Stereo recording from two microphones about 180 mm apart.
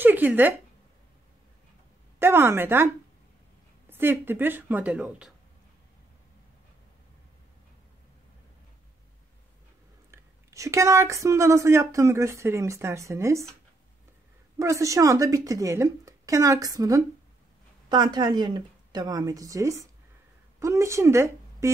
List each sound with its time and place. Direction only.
0.0 s speech: 10° right (ahead or behind)
2.1 s speech: 10° right (ahead or behind)
3.9 s speech: 10° right (ahead or behind)
10.1 s speech: 15° right (ahead or behind)
14.6 s a woman's voice: 15° right (ahead or behind)